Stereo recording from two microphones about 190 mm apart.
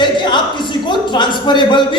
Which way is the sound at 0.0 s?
25° left (ahead or behind).